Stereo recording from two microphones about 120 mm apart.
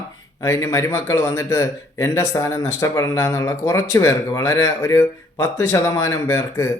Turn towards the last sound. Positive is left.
turn(degrees=25)  # may be behind; listen again after turning